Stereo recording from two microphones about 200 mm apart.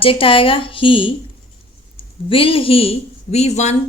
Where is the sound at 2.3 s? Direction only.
25° left (ahead or behind).